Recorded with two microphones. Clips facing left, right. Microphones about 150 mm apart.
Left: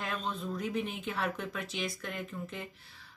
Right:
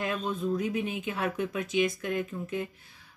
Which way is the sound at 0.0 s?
10° right (ahead or behind).